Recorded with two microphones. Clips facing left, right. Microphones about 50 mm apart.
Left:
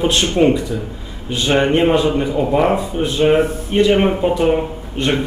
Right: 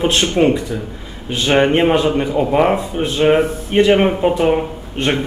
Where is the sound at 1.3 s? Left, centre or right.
Right.